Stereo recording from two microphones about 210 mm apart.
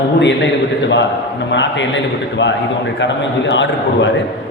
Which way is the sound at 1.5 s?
60° left (ahead or behind).